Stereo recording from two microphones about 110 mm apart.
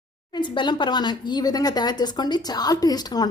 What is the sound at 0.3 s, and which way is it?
Speech, 45° left (ahead or behind).